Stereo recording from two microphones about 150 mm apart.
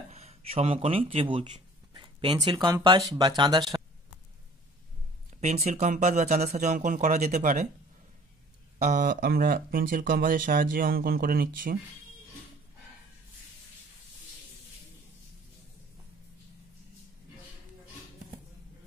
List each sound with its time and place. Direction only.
0.1 s speech: 45° right (ahead or behind); by 3.6 s 30° right (ahead or behind)
5.4 s speech: 50° right (ahead or behind)
8.8 s speech: 60° right (ahead or behind); by 11.8 s 75° right (ahead or behind)